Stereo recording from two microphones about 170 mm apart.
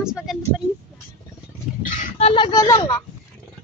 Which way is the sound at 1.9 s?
45° left (ahead or behind).